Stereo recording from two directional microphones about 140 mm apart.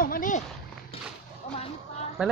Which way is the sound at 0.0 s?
75° left (ahead or behind).